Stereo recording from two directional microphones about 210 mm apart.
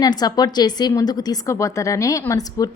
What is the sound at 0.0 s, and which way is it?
A woman's voice, 20° left (ahead or behind).